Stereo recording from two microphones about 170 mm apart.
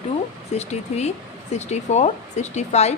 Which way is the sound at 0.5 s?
40° left (ahead or behind).